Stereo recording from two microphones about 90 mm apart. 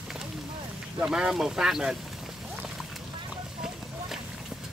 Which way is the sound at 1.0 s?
10° right (ahead or behind).